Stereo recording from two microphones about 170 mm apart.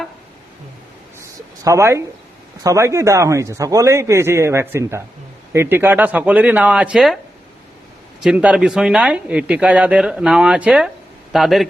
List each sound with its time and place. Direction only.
1.6 s a man's voice: 15° right (ahead or behind)
8.2 s speech: 5° right (ahead or behind)